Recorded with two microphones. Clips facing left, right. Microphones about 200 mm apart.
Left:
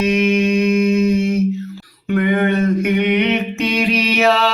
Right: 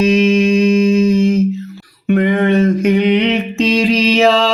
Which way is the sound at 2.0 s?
25° right (ahead or behind).